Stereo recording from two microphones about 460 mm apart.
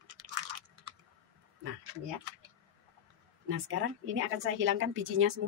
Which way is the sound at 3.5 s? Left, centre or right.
Right.